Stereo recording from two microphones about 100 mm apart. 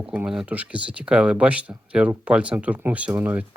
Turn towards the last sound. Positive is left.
turn(degrees=-20)  # may be behind; listen again after turning